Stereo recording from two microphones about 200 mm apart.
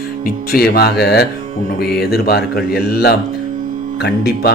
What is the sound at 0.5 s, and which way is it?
Speech, 50° left (ahead or behind).